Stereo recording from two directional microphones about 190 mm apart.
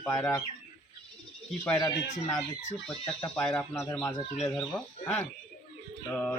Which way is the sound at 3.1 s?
5° left (ahead or behind).